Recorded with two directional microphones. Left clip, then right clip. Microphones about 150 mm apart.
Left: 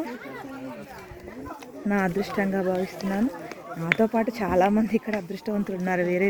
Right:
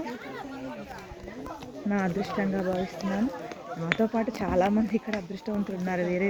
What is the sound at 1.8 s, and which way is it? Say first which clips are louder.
Speech: left 4 dB; 90° left.